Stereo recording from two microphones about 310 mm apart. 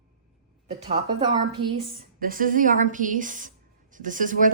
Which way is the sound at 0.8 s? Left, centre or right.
Centre.